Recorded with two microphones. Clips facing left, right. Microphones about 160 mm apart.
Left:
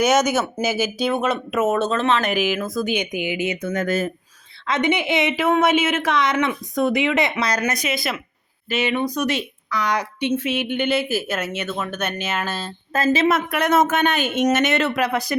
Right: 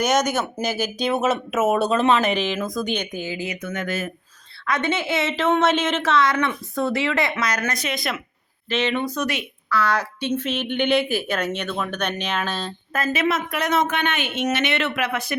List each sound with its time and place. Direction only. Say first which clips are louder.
0.0 s a woman's voice: left 3 dB; 5° left (ahead or behind); by 2.3 s 10° right (ahead or behind)
2.3 s a woman's voice: left 2 dB; 5° left (ahead or behind); by 4.1 s 40° left (ahead or behind)
4.6 s a woman's voice: left 3 dB; 20° left (ahead or behind)
7.3 s speech: left 2 dB; 30° left (ahead or behind)
7.6 s a woman's voice: left 3 dB; 15° left (ahead or behind)
7.9 s a woman's voice: left 1 dB; centre (ahead or behind)
12.9 s a woman's voice: left 5 dB; 30° left (ahead or behind)
13.2 s speech: left 4 dB; 55° left (ahead or behind); by 15.4 s 35° left (ahead or behind)